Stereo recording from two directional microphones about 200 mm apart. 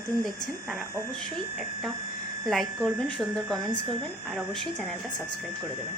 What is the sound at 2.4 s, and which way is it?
Speech, centre (ahead or behind).